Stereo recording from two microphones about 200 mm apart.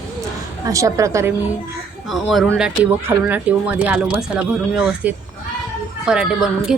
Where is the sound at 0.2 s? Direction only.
15° right (ahead or behind).